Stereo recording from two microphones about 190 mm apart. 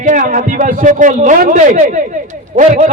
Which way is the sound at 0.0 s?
45° right (ahead or behind).